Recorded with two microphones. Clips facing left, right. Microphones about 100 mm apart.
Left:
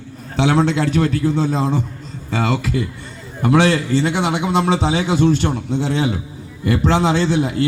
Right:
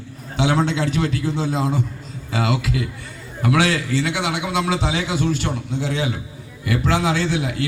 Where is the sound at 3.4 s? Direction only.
30° left (ahead or behind).